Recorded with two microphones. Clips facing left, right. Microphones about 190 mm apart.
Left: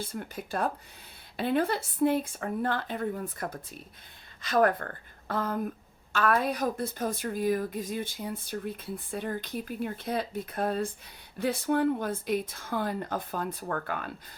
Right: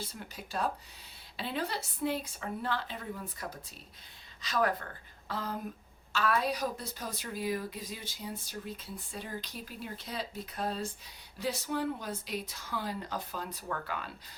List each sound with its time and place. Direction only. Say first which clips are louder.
0.0 s a woman's voice: left 7 dB; 50° left (ahead or behind)